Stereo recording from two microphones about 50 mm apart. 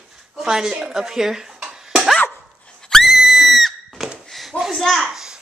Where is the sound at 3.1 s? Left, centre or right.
Centre.